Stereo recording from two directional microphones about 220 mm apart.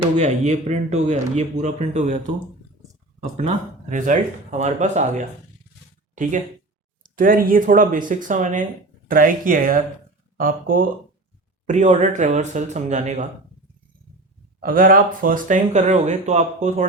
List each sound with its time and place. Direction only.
0.2 s speech: 30° right (ahead or behind)
3.3 s speech: 35° right (ahead or behind)
7.0 s speech: 40° right (ahead or behind)
14.6 s speech: 40° right (ahead or behind)